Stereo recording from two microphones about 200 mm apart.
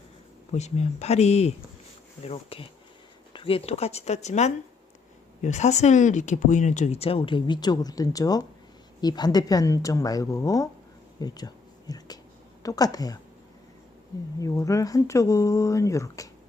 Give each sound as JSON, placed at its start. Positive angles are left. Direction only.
{"t": 0.5, "sound": "speech", "side_deg": 35}
{"t": 14.3, "sound": "speech", "side_deg": 15}